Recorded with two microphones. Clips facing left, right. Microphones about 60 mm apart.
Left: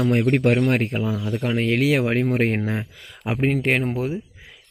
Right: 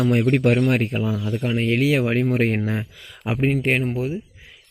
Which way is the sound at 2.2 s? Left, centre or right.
Left.